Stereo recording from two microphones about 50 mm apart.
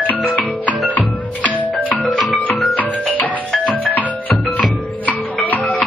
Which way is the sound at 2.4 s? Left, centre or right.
Left.